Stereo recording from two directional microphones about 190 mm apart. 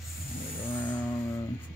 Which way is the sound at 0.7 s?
10° left (ahead or behind).